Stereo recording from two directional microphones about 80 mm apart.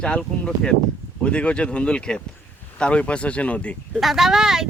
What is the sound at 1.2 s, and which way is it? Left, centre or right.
Speech, centre.